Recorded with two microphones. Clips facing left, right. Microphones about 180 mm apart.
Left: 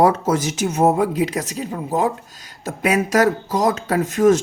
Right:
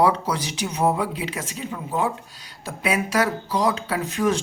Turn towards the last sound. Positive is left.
turn(degrees=45)  # may be behind; listen again after turning